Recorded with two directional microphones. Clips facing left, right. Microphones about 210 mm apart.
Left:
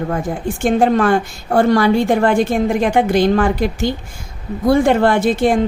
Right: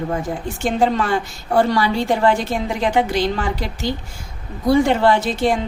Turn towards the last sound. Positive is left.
turn(degrees=50)  # may be behind; listen again after turning